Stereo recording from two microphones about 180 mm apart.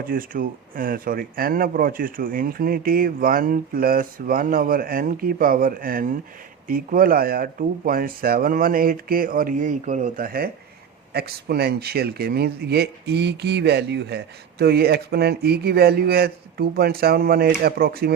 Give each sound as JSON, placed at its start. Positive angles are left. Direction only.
{"t": 0.0, "sound": "speech", "side_deg": -50}